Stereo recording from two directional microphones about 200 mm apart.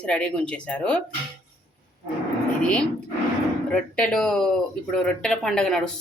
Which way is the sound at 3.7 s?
5° left (ahead or behind).